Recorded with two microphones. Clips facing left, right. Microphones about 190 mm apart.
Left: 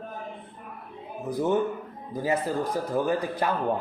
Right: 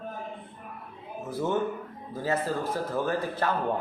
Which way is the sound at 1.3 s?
15° left (ahead or behind).